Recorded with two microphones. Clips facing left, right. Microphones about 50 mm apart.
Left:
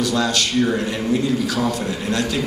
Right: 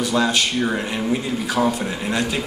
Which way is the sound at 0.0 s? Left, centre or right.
Right.